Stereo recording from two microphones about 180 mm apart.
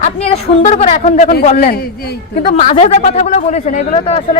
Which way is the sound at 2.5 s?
35° left (ahead or behind).